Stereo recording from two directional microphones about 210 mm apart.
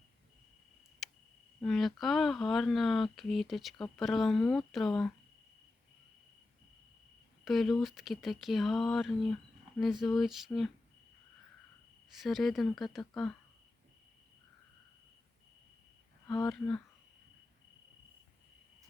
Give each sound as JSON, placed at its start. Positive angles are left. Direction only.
{"t": 1.0, "sound": "a sound", "side_deg": 0}
{"t": 1.6, "sound": "speech", "side_deg": 0}
{"t": 7.4, "sound": "speech", "side_deg": 0}
{"t": 12.1, "sound": "speech", "side_deg": 0}
{"t": 16.2, "sound": "speech", "side_deg": 10}